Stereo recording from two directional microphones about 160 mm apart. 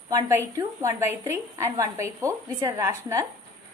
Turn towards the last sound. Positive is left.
turn(degrees=-20)  # may be behind; listen again after turning